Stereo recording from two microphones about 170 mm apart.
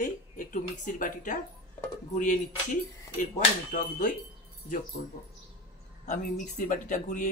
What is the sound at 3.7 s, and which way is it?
Speech, 45° left (ahead or behind).